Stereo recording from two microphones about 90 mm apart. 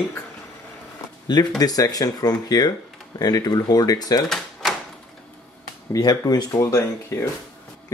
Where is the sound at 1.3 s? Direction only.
50° left (ahead or behind).